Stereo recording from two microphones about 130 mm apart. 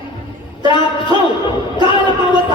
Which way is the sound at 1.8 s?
35° left (ahead or behind).